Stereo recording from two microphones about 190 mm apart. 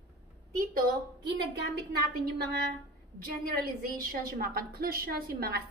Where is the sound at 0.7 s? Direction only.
55° right (ahead or behind).